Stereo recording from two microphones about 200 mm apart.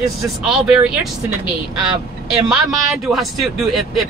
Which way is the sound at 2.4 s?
Centre (ahead or behind).